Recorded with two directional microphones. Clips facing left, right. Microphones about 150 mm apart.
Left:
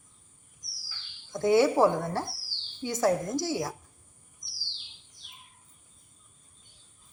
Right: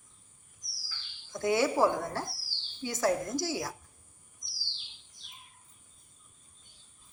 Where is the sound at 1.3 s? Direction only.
25° left (ahead or behind).